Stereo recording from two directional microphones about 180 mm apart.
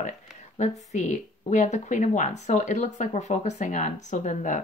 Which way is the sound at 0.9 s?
40° left (ahead or behind).